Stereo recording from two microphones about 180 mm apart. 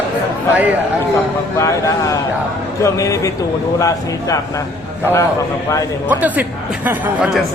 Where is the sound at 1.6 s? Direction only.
15° left (ahead or behind).